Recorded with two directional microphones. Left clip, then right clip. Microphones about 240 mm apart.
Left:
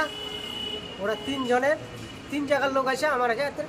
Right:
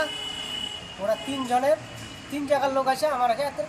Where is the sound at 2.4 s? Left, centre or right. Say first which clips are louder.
Right 1 dB; centre.